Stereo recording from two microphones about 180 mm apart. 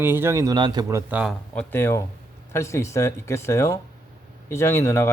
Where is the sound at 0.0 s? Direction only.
10° right (ahead or behind).